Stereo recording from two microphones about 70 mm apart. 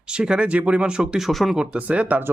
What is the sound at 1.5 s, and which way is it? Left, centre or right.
Speech, centre.